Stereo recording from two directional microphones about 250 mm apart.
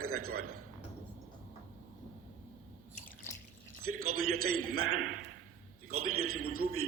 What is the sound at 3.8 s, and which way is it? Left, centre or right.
A man's voice, right.